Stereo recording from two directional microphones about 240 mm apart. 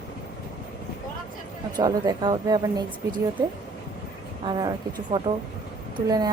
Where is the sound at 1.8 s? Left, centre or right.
Centre.